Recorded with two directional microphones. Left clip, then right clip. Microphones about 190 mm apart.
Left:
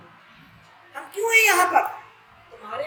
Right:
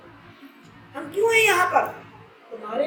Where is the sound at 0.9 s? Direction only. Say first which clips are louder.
Even; 20° left (ahead or behind).